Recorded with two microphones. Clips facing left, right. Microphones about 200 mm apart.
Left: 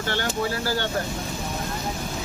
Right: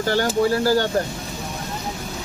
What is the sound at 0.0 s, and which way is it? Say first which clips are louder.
Speech: right 7 dB; 40° right (ahead or behind).